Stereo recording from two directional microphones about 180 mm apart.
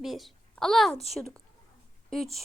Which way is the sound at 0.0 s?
Centre (ahead or behind).